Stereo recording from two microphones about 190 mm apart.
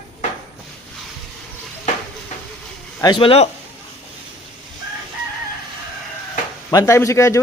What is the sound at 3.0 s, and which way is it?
Speech, 25° left (ahead or behind).